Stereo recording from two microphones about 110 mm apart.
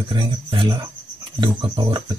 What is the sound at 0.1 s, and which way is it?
Speech, 50° right (ahead or behind).